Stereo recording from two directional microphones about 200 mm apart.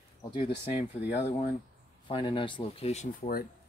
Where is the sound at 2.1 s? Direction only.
25° left (ahead or behind).